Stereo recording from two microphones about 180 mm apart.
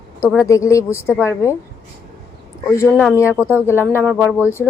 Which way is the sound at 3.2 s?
10° right (ahead or behind).